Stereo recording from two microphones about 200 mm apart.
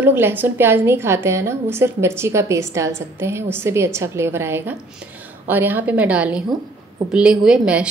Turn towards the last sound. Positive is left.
turn(degrees=-5)  # may be behind; listen again after turning